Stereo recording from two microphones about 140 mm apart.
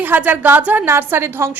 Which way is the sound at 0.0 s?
15° right (ahead or behind).